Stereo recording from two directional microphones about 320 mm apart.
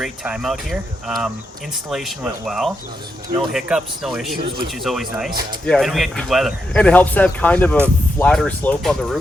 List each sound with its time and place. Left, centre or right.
0.0 s speech: centre